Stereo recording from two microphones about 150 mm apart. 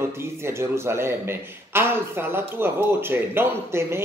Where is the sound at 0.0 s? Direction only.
15° right (ahead or behind).